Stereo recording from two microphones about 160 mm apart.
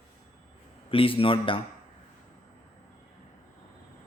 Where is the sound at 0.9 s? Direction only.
35° left (ahead or behind).